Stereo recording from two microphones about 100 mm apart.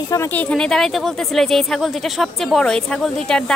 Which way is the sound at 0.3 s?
15° left (ahead or behind).